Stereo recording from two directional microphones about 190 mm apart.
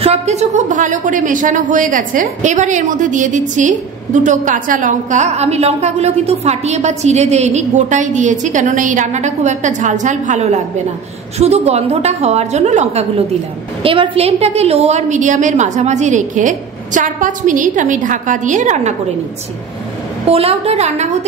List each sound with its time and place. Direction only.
0.0 s a woman's voice: 35° right (ahead or behind)
20.2 s a woman's voice: 30° right (ahead or behind)